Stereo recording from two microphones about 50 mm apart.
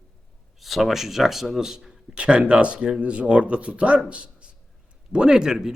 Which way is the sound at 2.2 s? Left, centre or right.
Right.